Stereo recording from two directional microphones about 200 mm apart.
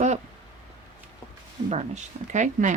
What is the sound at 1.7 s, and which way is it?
Speech, 35° right (ahead or behind).